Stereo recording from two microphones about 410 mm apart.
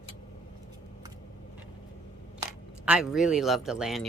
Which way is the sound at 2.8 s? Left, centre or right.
Centre.